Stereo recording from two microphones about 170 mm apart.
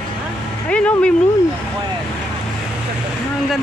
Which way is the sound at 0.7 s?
5° left (ahead or behind).